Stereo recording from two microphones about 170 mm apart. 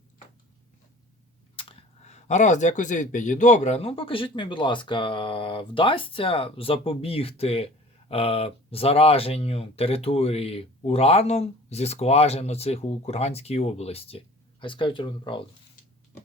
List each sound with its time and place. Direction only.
1.5 s speech: 40° left (ahead or behind)